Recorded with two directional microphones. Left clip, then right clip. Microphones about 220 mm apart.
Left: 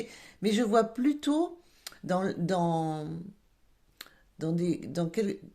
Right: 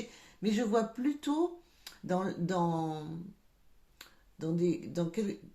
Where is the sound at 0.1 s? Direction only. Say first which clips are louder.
Left 4 dB; 35° left (ahead or behind).